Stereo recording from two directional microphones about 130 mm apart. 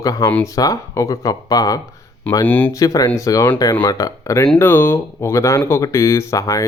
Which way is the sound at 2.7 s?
25° left (ahead or behind).